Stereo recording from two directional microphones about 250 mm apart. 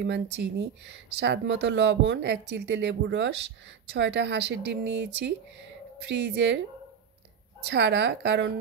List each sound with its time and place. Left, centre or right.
0.0 s speech: right
7.6 s speech: right